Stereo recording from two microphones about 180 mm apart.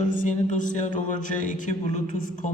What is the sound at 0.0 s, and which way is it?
A man's voice, 45° left (ahead or behind).